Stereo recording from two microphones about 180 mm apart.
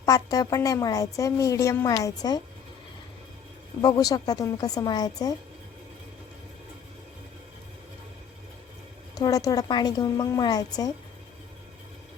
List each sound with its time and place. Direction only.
0.0 s a woman's voice: 20° left (ahead or behind)
3.8 s a woman's voice: 20° left (ahead or behind)
9.1 s a woman's voice: 20° left (ahead or behind)